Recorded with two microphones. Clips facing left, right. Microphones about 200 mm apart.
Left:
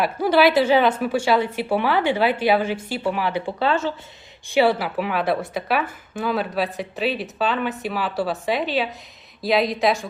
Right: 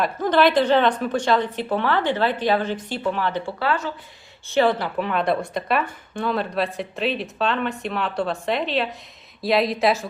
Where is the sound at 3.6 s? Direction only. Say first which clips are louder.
Left 3 dB; 25° left (ahead or behind).